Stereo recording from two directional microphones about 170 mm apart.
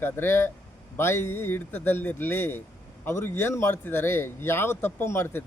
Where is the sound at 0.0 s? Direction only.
15° left (ahead or behind).